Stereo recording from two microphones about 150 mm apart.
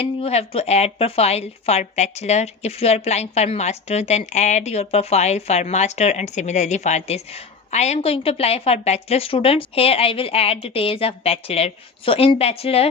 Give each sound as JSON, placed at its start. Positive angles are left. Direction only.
{"t": 0.0, "sound": "a woman's voice", "side_deg": 40}